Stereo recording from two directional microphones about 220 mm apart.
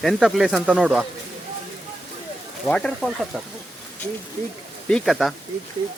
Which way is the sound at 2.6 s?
5° left (ahead or behind).